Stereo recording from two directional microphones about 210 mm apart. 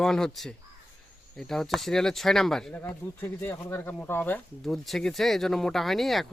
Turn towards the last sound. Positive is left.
turn(degrees=0)  # may be behind; listen again after turning